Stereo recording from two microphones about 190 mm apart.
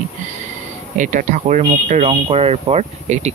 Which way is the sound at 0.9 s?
40° right (ahead or behind).